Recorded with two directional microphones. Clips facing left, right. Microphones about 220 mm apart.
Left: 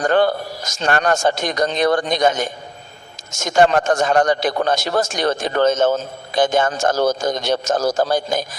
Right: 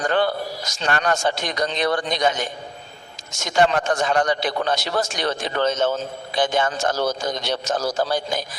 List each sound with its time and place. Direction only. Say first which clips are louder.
0.0 s a man's voice: left 5 dB; 45° left (ahead or behind)